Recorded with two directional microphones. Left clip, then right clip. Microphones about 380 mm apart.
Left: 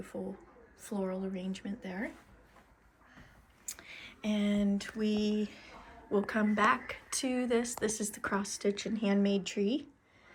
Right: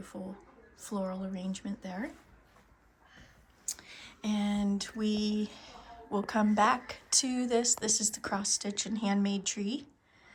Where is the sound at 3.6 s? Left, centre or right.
Centre.